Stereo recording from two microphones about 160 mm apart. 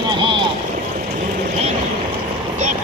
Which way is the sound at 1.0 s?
60° right (ahead or behind).